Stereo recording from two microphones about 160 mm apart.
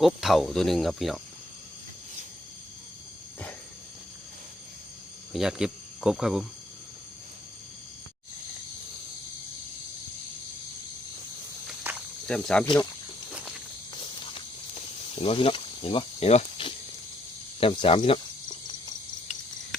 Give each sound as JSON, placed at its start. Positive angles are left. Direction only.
{"t": 0.0, "sound": "speech", "side_deg": 0}
{"t": 5.3, "sound": "speech", "side_deg": -5}
{"t": 11.8, "sound": "snake", "side_deg": -10}
{"t": 12.3, "sound": "speech", "side_deg": 5}
{"t": 13.9, "sound": "walk", "side_deg": 30}
{"t": 15.1, "sound": "speech", "side_deg": 35}
{"t": 17.6, "sound": "cricket", "side_deg": 35}